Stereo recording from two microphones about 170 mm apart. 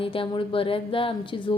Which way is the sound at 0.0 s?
30° left (ahead or behind).